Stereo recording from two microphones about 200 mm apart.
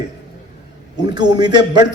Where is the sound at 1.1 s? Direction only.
20° right (ahead or behind).